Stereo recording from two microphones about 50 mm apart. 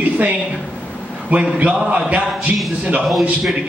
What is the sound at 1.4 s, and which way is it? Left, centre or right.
A man's voice, right.